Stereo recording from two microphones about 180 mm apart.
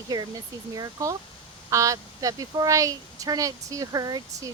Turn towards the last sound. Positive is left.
turn(degrees=-20)  # may be behind; listen again after turning